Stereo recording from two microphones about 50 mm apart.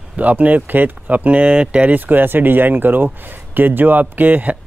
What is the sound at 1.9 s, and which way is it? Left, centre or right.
Speech, right.